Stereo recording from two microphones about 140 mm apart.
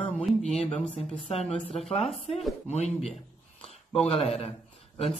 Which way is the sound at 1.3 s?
50° left (ahead or behind).